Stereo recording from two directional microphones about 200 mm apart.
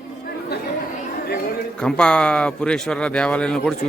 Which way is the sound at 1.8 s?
5° left (ahead or behind).